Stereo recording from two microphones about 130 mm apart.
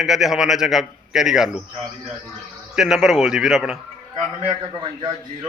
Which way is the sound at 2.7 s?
5° right (ahead or behind).